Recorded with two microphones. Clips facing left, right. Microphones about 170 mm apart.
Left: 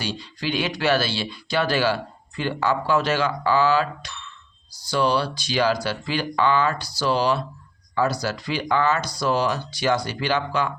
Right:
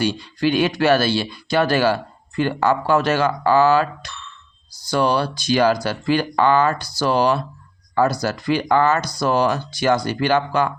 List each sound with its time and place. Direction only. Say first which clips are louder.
0.0 s speech: right 9 dB; 55° right (ahead or behind)